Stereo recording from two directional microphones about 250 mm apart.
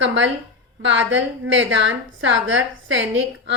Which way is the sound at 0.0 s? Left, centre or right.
Right.